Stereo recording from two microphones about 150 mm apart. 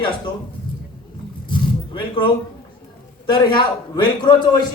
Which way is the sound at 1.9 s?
30° left (ahead or behind).